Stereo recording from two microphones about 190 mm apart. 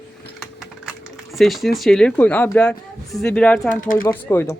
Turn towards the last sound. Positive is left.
turn(degrees=10)  # may be behind; listen again after turning